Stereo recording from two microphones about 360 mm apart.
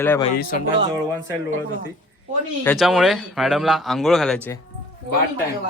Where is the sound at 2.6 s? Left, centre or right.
Centre.